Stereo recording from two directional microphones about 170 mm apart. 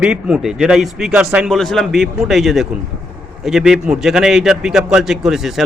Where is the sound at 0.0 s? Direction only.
5° right (ahead or behind).